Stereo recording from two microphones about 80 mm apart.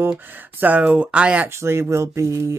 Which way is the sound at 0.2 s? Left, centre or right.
Right.